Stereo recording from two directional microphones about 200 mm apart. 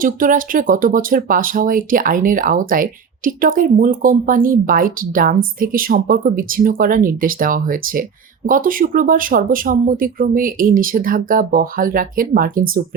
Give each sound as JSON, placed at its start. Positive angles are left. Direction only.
{"t": 0.0, "sound": "speech", "side_deg": -45}